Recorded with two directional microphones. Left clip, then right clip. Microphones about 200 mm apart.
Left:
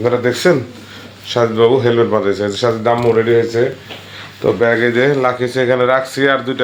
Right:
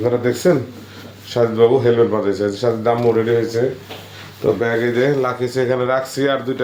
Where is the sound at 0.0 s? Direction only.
25° left (ahead or behind).